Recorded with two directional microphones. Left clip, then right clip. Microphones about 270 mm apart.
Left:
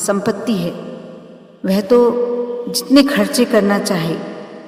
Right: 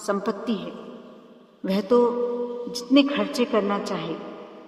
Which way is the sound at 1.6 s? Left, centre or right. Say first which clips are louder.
Left 8 dB; left.